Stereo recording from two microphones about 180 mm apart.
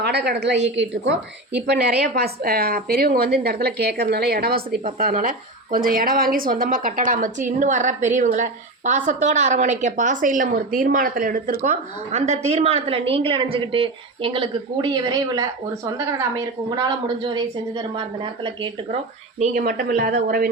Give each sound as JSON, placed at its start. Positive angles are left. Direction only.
{"t": 0.0, "sound": "a woman's voice", "side_deg": -65}
{"t": 4.9, "sound": "a woman's voice", "side_deg": -50}
{"t": 16.6, "sound": "a woman's voice", "side_deg": -25}
{"t": 19.4, "sound": "a woman's voice", "side_deg": -50}